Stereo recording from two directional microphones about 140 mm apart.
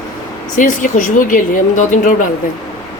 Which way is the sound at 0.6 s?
65° left (ahead or behind).